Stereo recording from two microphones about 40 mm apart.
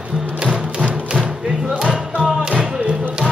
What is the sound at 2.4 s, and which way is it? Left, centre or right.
Music, centre.